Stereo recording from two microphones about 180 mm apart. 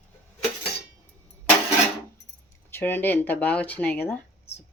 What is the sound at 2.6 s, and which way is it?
Speech, 10° left (ahead or behind).